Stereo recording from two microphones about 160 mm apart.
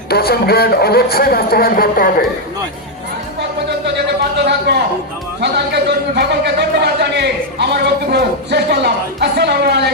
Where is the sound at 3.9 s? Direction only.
90° right.